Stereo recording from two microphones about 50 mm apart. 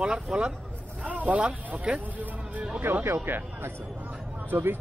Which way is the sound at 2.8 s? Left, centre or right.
Right.